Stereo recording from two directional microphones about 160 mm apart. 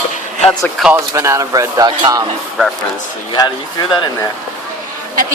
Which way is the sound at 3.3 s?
25° left (ahead or behind).